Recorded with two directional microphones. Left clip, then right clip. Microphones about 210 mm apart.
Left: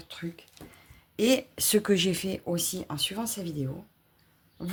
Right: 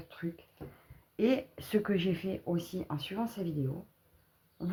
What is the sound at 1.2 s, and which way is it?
Speech, 45° left (ahead or behind).